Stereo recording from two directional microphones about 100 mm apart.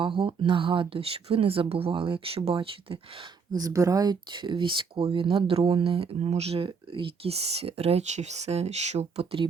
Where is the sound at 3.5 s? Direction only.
35° right (ahead or behind); by 9.5 s 65° right (ahead or behind).